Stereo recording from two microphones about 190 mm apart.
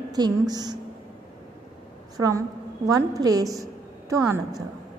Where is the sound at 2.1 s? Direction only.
20° right (ahead or behind).